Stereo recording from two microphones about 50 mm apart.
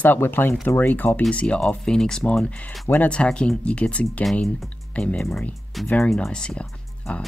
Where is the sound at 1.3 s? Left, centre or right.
Left.